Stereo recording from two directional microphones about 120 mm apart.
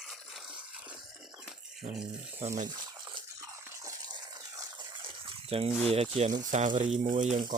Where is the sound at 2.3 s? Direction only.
75° right (ahead or behind).